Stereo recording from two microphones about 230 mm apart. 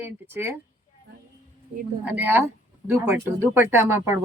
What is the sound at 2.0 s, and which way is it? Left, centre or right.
Speech, centre.